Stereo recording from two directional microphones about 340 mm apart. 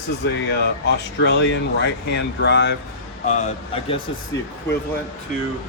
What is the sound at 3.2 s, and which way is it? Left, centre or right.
Speech, left.